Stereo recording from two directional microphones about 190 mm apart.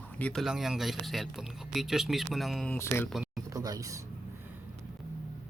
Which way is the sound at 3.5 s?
20° right (ahead or behind).